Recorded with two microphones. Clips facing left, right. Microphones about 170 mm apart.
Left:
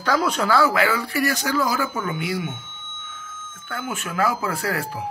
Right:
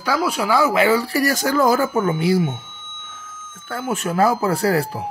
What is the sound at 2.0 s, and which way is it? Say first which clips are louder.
Speech: right 8 dB; 35° right (ahead or behind).